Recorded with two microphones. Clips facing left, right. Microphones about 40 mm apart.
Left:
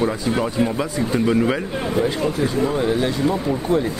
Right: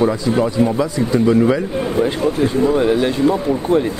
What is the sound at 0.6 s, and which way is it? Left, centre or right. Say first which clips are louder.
Speech: right 4 dB; left.